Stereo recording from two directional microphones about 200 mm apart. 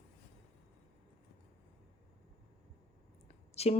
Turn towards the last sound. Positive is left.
turn(degrees=30)  # may be behind; listen again after turning